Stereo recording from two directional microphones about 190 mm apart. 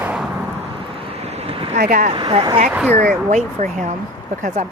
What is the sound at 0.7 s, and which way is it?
Vehicle, 30° right (ahead or behind).